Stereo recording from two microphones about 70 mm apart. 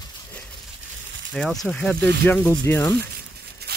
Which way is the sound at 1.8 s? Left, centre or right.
Centre.